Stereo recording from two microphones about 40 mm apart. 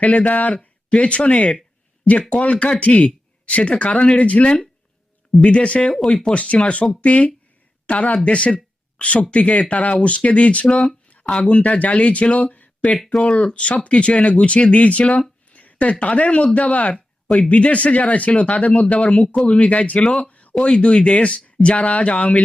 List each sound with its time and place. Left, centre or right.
0.0 s speech: left
0.9 s speech: left
12.5 s a sound: left
13.3 s speech: left
20.2 s a sound: left
20.7 s speech: left